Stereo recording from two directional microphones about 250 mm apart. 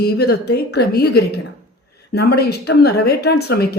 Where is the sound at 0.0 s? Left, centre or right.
Left.